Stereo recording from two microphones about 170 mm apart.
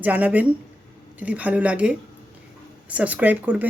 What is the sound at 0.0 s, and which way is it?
Speech, 10° right (ahead or behind).